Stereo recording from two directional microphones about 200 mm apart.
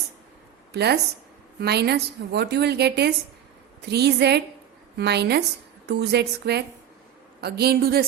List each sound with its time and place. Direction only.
0.7 s a woman's voice: 55° right (ahead or behind)